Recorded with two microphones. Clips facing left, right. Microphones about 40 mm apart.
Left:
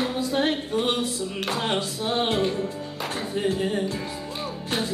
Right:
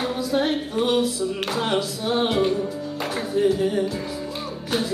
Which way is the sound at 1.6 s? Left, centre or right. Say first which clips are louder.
Right 4 dB; left.